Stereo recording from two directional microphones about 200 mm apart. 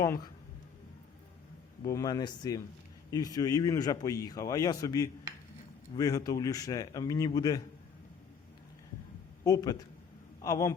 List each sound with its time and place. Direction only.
0.0 s speech: 15° left (ahead or behind)
1.8 s speech: 20° left (ahead or behind)
9.4 s a man's voice: 20° left (ahead or behind)